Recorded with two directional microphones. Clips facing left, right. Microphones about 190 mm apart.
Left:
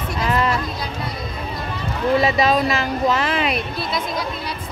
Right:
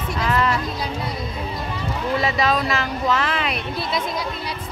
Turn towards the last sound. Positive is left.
turn(degrees=15)  # may be behind; listen again after turning